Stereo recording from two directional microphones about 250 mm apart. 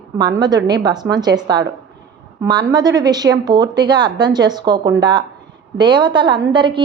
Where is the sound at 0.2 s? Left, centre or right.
Centre.